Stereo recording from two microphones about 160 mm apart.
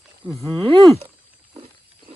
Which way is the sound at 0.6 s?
35° right (ahead or behind).